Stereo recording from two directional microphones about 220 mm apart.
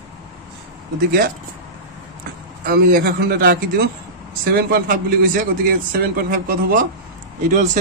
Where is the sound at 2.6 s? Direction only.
40° right (ahead or behind).